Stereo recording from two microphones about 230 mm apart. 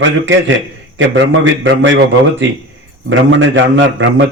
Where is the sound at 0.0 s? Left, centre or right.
Right.